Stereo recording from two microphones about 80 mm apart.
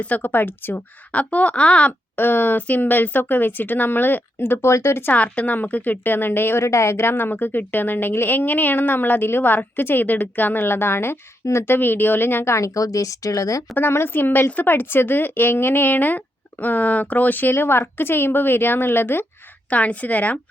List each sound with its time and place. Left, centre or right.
0.0 s a woman's voice: left
5.1 s a woman's voice: centre; by 13.7 s left
13.7 s a woman's voice: left